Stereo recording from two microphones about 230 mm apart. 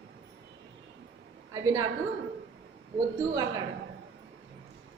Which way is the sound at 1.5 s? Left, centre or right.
Centre.